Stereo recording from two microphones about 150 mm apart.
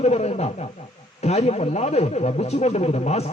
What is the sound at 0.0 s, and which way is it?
Radio, 45° left (ahead or behind).